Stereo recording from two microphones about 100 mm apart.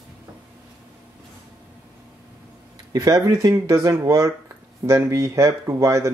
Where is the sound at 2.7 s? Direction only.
40° right (ahead or behind).